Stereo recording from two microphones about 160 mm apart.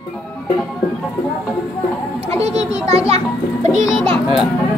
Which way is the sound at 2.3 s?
40° right (ahead or behind).